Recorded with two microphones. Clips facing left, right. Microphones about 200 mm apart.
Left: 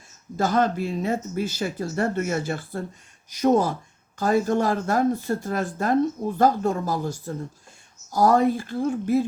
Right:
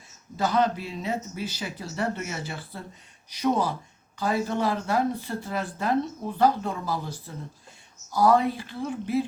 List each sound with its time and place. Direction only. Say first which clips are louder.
0.3 s speech: left 2 dB; 45° left (ahead or behind)